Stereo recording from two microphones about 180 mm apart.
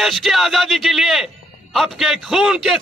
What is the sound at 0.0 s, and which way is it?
A man's voice, centre (ahead or behind).